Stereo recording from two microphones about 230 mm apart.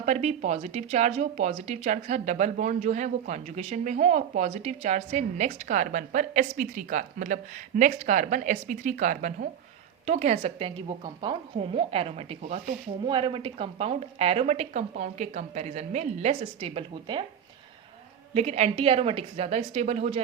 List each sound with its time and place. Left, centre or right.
0.0 s a woman's voice: right
18.3 s speech: right